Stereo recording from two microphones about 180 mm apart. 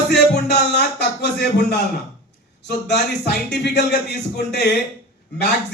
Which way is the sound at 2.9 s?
70° left (ahead or behind).